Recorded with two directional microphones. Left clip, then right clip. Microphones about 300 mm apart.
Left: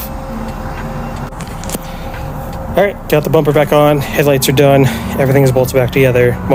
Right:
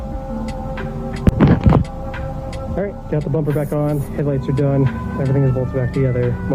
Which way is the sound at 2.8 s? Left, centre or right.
Centre.